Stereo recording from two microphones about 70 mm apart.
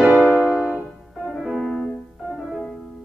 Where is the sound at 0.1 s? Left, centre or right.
Left.